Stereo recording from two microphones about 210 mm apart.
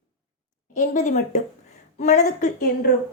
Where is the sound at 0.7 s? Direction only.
35° left (ahead or behind).